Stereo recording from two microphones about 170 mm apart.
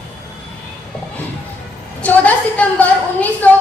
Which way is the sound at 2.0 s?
10° left (ahead or behind).